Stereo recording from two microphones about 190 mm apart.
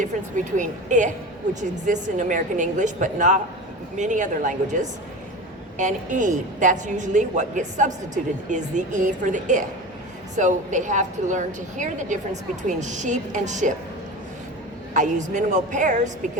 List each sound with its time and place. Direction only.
0.0 s speech: 40° right (ahead or behind)
14.9 s speech: 40° right (ahead or behind)